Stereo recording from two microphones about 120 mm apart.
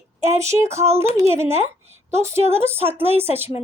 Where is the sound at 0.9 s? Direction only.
20° right (ahead or behind).